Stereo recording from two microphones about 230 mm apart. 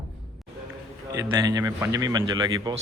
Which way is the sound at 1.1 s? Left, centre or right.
Centre.